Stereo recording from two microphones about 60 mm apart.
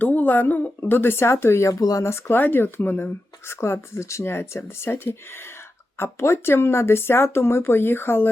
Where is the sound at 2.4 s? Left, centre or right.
Left.